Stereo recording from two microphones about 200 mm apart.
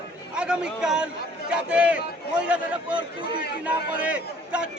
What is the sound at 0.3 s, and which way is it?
A man's voice, 5° right (ahead or behind).